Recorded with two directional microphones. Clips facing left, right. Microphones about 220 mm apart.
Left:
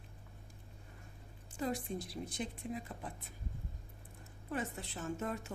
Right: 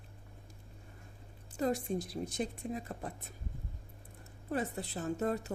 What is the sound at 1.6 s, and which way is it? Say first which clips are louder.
A woman's voice: right 5 dB; 45° right (ahead or behind).